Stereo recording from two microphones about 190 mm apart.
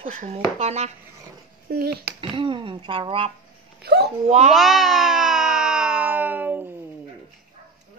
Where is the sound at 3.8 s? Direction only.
60° right (ahead or behind).